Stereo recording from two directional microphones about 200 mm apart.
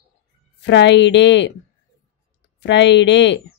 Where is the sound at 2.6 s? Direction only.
65° left (ahead or behind).